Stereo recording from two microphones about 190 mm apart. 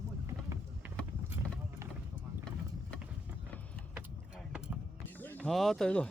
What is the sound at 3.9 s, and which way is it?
Keys jangling, 5° right (ahead or behind).